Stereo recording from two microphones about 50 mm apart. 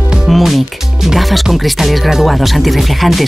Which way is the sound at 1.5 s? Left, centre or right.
Centre.